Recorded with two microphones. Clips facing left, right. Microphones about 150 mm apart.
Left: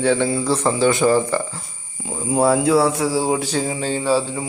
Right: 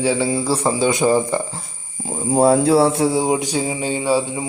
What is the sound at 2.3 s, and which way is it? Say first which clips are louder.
Speech: right 2 dB; 30° right (ahead or behind).